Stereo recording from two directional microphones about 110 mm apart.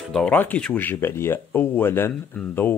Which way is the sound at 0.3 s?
15° left (ahead or behind).